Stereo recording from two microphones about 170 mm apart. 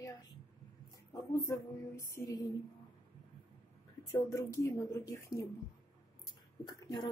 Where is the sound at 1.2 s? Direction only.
20° left (ahead or behind).